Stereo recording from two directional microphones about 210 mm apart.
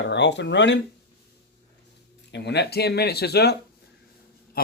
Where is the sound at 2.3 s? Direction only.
55° left (ahead or behind).